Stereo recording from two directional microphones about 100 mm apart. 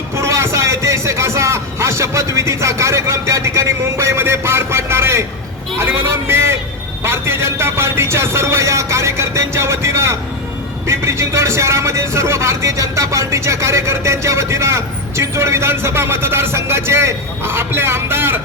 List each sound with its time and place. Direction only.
0.2 s speech: 30° right (ahead or behind)